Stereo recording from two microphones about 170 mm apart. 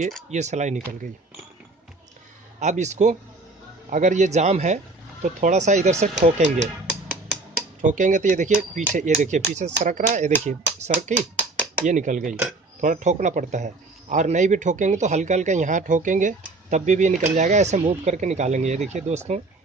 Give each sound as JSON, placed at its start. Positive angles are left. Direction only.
{"t": 0.3, "sound": "speech", "side_deg": -40}
{"t": 2.6, "sound": "speech", "side_deg": -45}
{"t": 7.8, "sound": "speech", "side_deg": -50}